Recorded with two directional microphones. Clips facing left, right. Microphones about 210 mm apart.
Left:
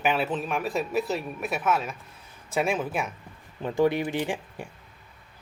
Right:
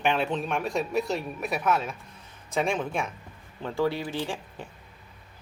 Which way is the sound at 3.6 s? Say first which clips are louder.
Left 4 dB; 20° left (ahead or behind).